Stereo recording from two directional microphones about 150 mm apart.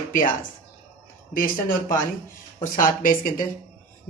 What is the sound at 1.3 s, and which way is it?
Speech, 70° left (ahead or behind).